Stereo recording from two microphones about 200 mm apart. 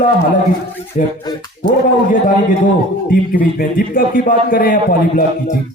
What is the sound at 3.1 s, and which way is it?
A man's voice, 45° left (ahead or behind).